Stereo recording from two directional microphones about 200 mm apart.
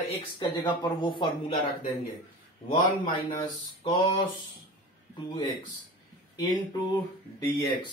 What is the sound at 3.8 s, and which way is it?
Speech, 20° left (ahead or behind).